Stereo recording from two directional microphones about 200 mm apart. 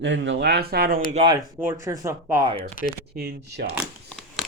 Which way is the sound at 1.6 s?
10° right (ahead or behind).